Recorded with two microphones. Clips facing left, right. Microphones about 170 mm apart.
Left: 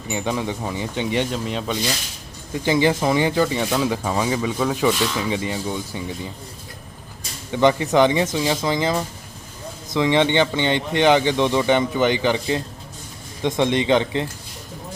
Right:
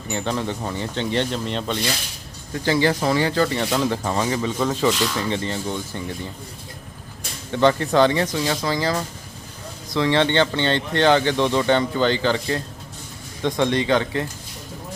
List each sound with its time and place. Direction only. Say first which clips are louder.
0.1 s speech: left 1 dB; 10° left (ahead or behind)
7.5 s speech: left 1 dB; 15° left (ahead or behind)